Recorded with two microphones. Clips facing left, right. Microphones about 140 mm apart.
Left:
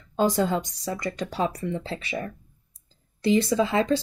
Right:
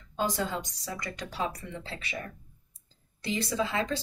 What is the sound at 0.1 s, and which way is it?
Speech, 40° left (ahead or behind).